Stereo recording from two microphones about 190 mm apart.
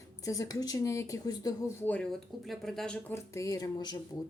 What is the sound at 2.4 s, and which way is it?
A woman's voice, centre (ahead or behind).